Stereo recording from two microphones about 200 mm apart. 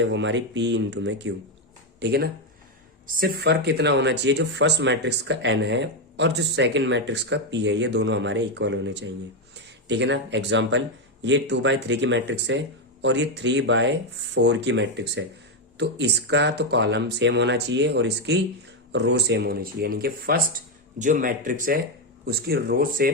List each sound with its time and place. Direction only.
0.0 s speech: 65° right (ahead or behind); by 23.1 s 45° right (ahead or behind)